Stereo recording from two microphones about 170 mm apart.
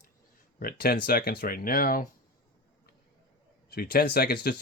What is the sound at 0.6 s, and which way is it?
Speech, 60° left (ahead or behind).